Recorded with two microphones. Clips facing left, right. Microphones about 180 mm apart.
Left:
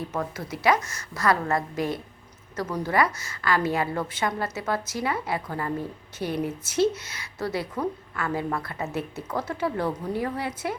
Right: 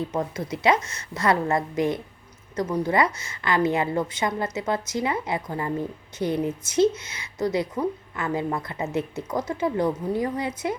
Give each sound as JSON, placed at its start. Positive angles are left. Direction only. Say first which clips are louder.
{"t": 0.1, "sound": "a woman's voice", "louder": "right 3 dB", "side_deg": -20}